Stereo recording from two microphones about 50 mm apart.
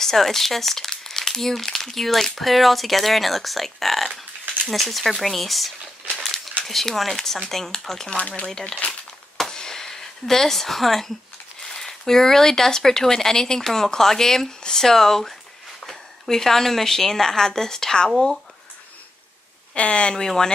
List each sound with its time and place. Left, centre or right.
0.0 s speech: centre
6.1 s a sound: centre
6.6 s speech: centre
8.2 s speech: left
8.5 s speech: centre
9.4 s a sound: centre
11.6 s a woman's voice: centre
19.7 s speech: left